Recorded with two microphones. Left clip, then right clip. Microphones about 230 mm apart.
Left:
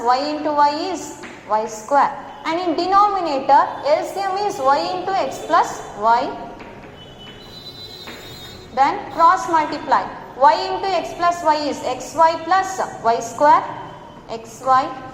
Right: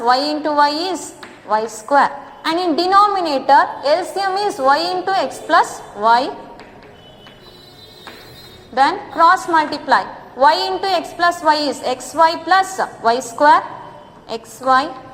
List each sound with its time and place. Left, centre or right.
0.0 s a woman's voice: right
8.7 s a woman's voice: right